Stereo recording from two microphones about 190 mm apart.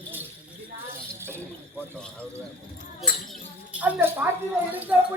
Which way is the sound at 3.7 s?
5° right (ahead or behind).